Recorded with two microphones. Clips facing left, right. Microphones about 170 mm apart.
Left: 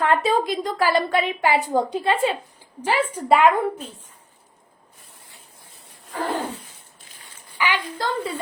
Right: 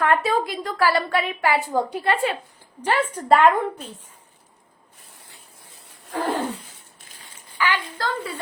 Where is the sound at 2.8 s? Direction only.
10° left (ahead or behind).